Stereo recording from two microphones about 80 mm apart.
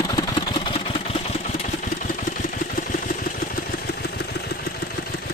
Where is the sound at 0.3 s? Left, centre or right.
Left.